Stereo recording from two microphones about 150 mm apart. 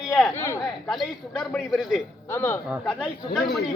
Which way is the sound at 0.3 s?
15° left (ahead or behind).